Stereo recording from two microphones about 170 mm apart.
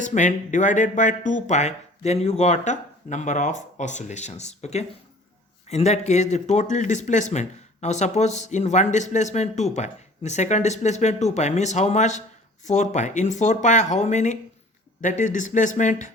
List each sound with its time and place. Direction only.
0.0 s speech: 45° left (ahead or behind)